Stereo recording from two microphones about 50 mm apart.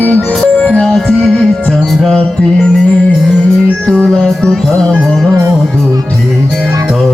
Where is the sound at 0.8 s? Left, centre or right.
Centre.